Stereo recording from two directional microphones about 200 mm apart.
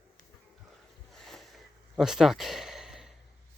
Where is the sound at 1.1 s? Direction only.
Centre (ahead or behind).